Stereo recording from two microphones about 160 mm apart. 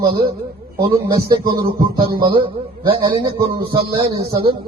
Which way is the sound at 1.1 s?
25° right (ahead or behind).